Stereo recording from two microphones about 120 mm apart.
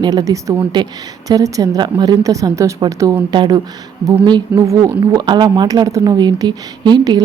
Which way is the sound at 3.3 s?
40° right (ahead or behind).